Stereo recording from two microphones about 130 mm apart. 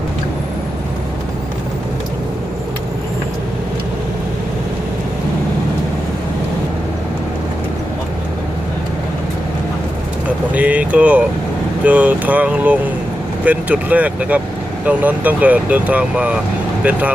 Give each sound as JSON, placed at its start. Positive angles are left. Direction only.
{"t": 10.2, "sound": "vehicle", "side_deg": -10}
{"t": 11.8, "sound": "speech", "side_deg": -10}